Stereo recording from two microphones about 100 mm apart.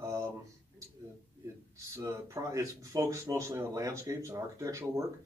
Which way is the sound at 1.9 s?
30° right (ahead or behind).